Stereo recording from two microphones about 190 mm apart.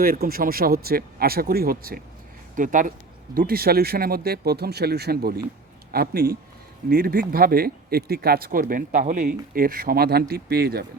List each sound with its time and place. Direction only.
0.0 s speech: 50° right (ahead or behind)